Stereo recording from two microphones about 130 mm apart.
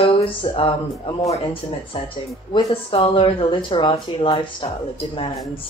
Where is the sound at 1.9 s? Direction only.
40° left (ahead or behind).